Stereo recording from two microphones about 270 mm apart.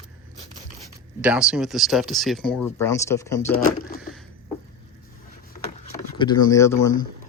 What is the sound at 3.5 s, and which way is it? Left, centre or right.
Speech, left.